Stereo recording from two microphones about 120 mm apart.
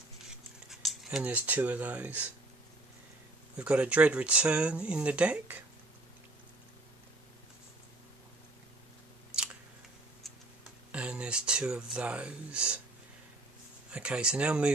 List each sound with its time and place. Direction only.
0.7 s speech: 5° right (ahead or behind)
3.5 s speech: 10° right (ahead or behind)
10.9 s speech: 10° right (ahead or behind)
13.9 s speech: 10° right (ahead or behind)